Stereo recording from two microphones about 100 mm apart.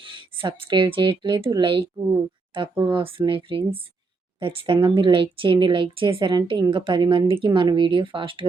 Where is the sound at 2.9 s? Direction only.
60° right (ahead or behind).